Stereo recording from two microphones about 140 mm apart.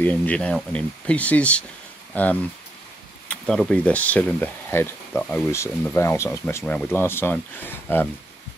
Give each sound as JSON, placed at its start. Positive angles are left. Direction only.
{"t": 0.0, "sound": "speech", "side_deg": 10}
{"t": 5.5, "sound": "speech", "side_deg": 20}